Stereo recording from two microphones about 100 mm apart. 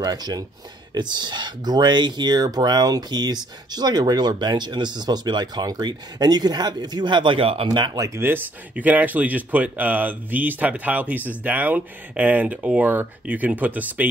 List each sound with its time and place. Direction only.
0.0 s speech: 40° right (ahead or behind)
8.0 s speech: 25° right (ahead or behind)